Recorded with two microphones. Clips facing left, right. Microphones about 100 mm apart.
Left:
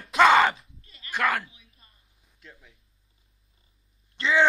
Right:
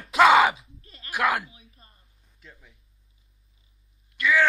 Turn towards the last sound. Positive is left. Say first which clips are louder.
# even
turn(degrees=25)  # may be behind; listen again after turning